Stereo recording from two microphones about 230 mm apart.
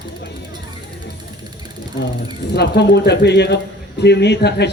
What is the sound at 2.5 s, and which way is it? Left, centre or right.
A man's voice, left.